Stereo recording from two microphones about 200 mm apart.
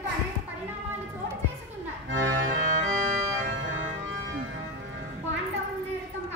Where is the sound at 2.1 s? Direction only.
65° right (ahead or behind).